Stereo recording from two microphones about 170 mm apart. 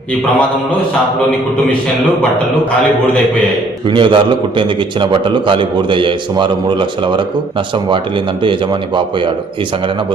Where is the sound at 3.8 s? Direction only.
30° right (ahead or behind).